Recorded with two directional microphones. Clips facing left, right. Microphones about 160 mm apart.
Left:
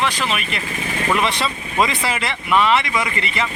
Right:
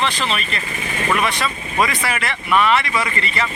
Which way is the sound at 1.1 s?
25° left (ahead or behind).